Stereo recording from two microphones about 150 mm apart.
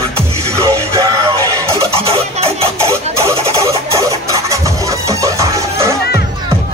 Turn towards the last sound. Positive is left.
turn(degrees=-20)  # may be behind; listen again after turning